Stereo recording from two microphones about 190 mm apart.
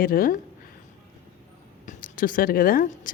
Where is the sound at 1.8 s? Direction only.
45° left (ahead or behind).